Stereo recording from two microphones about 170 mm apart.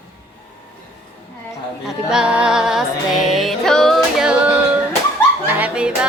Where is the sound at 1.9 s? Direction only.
5° right (ahead or behind).